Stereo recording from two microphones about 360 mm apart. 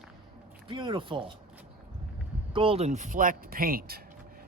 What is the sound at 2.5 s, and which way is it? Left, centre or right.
Speech, centre.